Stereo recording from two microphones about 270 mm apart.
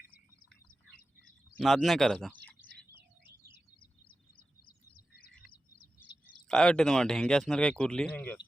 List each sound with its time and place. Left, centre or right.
1.2 s bird: centre
4.9 s a sound: left
6.5 s speech: centre